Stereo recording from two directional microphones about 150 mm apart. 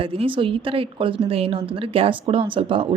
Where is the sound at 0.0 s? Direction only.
40° right (ahead or behind).